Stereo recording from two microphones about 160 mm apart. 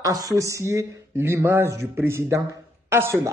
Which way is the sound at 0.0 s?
20° right (ahead or behind).